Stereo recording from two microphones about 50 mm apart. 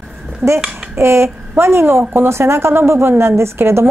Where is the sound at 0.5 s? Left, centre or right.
Centre.